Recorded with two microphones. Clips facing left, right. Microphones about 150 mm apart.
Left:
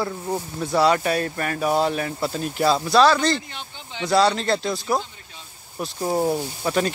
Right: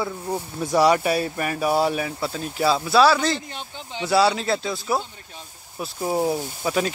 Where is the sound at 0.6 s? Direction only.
10° right (ahead or behind).